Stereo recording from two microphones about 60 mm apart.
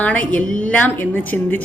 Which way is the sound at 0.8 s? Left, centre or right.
Left.